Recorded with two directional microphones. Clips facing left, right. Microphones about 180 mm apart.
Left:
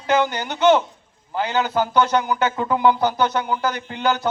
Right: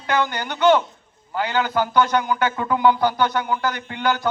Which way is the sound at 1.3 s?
25° left (ahead or behind).